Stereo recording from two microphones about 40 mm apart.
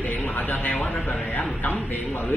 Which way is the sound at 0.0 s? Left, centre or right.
Left.